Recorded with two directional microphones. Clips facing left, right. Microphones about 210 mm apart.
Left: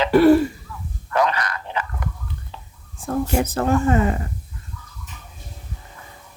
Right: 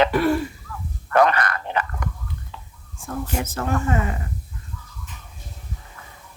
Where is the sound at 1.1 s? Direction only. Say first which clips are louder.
Right 3 dB; 55° right (ahead or behind).